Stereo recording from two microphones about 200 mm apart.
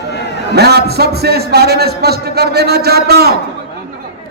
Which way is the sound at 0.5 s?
55° right (ahead or behind).